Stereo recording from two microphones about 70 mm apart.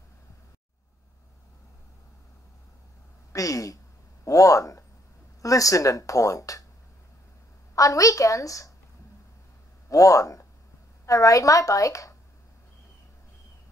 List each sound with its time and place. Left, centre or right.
3.3 s speech: left
4.2 s a sound: left
5.4 s speech: left
7.7 s speech: left
9.8 s speech: left